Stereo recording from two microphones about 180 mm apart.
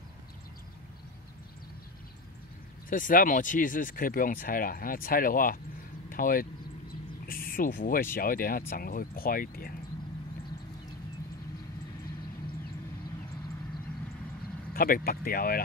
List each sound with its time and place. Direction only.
2.9 s speech: 50° left (ahead or behind)
14.7 s speech: 55° left (ahead or behind)